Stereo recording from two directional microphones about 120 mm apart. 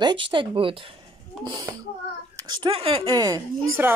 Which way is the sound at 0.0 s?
40° right (ahead or behind).